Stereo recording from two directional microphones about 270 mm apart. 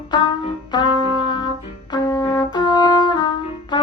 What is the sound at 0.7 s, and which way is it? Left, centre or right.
Music, centre.